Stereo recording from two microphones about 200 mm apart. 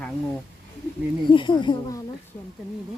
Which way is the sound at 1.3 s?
25° left (ahead or behind).